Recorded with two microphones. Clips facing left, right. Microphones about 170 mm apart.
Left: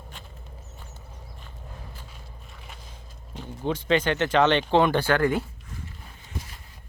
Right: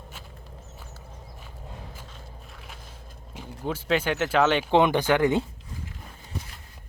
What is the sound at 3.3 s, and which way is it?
Speech, 5° right (ahead or behind).